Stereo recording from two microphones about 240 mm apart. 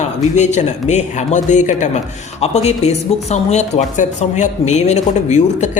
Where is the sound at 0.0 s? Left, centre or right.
Left.